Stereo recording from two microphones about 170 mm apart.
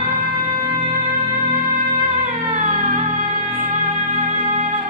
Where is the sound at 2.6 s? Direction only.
45° right (ahead or behind).